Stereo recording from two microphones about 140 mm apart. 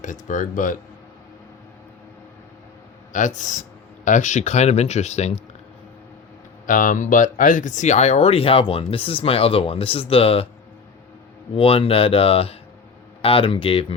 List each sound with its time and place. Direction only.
0.0 s speech: 65° left (ahead or behind)
3.1 s speech: 65° left (ahead or behind)
6.7 s speech: 70° left (ahead or behind); by 10.5 s 45° left (ahead or behind)
11.5 s speech: 40° left (ahead or behind)